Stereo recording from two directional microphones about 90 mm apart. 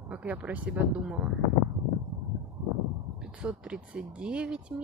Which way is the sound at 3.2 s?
10° right (ahead or behind).